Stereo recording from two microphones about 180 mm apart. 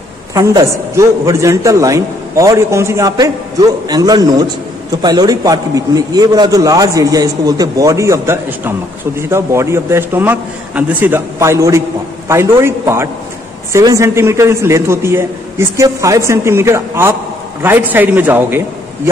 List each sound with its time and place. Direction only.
0.3 s a man's voice: 20° right (ahead or behind)